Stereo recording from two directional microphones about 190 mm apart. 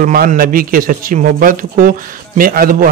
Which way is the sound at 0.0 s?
45° right (ahead or behind).